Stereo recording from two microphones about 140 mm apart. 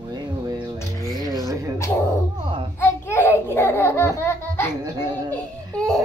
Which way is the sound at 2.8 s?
15° left (ahead or behind).